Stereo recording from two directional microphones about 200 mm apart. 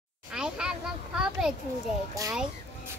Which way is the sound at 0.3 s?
5° right (ahead or behind).